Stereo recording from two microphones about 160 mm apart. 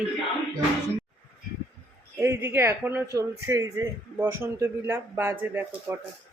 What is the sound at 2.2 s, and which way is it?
A man's voice, 15° right (ahead or behind).